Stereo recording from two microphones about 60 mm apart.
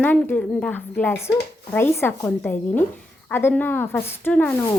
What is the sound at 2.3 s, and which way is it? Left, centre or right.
A woman's voice, left.